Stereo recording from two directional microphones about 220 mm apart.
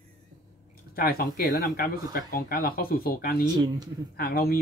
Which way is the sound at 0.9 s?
40° left (ahead or behind).